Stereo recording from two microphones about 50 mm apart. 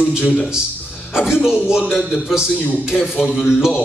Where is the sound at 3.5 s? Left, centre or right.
Centre.